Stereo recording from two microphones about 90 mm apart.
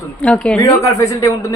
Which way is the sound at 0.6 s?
40° left (ahead or behind).